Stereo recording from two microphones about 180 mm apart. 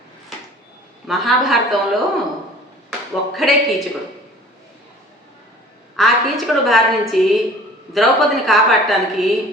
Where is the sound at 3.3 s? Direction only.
Centre (ahead or behind).